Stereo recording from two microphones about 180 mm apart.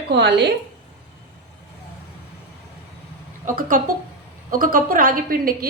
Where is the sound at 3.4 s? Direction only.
50° right (ahead or behind).